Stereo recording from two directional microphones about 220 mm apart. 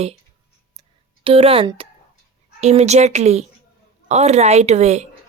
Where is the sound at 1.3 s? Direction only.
25° right (ahead or behind).